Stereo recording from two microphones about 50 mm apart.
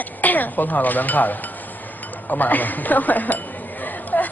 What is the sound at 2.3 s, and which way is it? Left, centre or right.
Speech, left.